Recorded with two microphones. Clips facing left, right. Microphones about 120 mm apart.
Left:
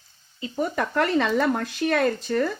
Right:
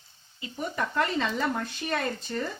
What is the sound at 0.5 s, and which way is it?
Speech, 70° left (ahead or behind).